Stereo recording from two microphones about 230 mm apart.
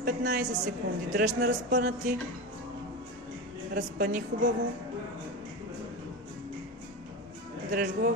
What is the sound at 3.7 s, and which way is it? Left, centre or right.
Speech, right.